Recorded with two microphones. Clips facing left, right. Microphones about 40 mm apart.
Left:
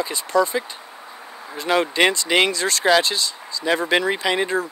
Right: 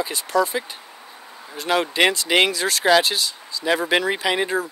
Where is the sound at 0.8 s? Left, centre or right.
Centre.